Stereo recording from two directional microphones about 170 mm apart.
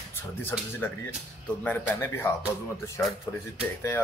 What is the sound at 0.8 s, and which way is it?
Speech, 10° left (ahead or behind).